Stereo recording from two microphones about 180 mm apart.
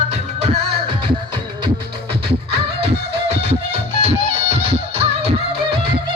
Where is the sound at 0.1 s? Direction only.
35° right (ahead or behind).